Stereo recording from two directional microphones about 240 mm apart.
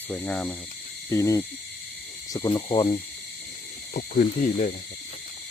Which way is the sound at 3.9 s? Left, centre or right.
Left.